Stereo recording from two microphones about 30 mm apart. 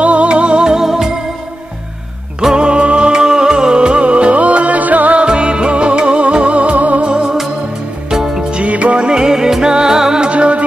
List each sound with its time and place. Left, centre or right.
0.0 s music: right
0.7 s music: centre
2.5 s music: right
3.1 s music: right
5.2 s music: right
7.1 s music: right
8.6 s music: right
9.1 s music: right
10.3 s music: right